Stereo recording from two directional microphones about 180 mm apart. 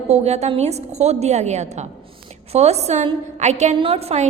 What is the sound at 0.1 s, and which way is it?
A woman's voice, 35° right (ahead or behind).